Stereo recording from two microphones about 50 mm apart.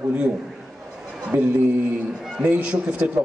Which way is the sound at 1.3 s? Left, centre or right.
Right.